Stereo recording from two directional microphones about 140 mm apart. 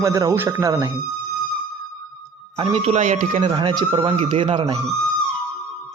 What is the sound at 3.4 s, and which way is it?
Speech, 35° right (ahead or behind).